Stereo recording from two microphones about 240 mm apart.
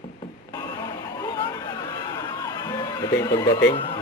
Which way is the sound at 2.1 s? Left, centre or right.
Centre.